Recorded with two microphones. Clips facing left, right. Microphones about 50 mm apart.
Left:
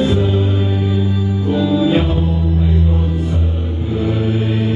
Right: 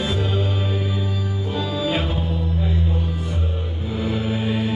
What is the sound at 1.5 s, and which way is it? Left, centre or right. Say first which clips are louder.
Music: left 9 dB; left.